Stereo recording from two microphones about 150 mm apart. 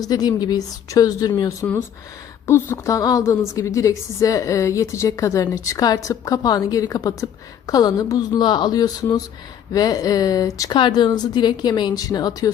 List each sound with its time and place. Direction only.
0.0 s a woman's voice: 25° left (ahead or behind)